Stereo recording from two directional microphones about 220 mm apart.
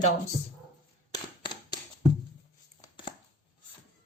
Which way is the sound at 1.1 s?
20° left (ahead or behind).